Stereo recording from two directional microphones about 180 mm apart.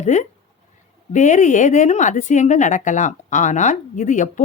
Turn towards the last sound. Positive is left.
turn(degrees=45)  # may be behind; listen again after turning